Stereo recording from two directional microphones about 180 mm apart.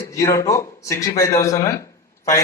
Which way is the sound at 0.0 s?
20° left (ahead or behind).